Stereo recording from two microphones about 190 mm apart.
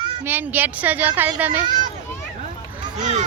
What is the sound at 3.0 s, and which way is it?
Speech, 40° right (ahead or behind).